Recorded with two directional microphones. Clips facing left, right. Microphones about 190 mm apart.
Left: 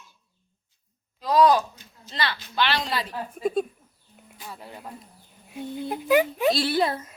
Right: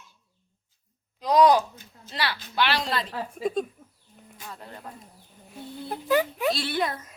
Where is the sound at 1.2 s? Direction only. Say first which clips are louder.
Even; 15° right (ahead or behind).